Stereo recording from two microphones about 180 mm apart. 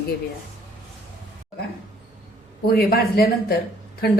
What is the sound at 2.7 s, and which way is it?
Speech, 60° left (ahead or behind).